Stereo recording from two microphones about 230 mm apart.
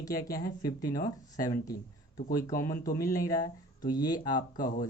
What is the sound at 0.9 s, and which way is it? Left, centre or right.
Speech, left.